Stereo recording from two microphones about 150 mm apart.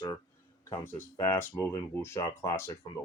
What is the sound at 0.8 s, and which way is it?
Speech, 15° left (ahead or behind).